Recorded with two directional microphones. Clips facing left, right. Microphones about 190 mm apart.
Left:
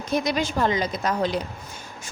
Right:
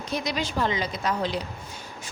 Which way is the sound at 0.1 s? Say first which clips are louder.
Left 5 dB; 50° left (ahead or behind).